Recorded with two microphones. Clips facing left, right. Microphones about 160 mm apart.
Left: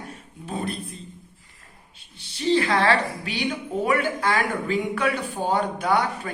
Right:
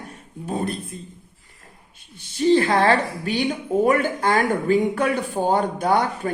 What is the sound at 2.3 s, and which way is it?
Speech, 50° right (ahead or behind).